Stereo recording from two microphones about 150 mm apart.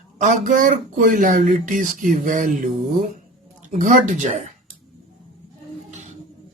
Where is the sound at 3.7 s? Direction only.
60° right (ahead or behind).